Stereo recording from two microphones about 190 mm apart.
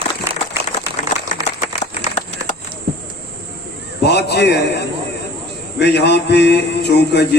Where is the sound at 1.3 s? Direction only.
40° left (ahead or behind).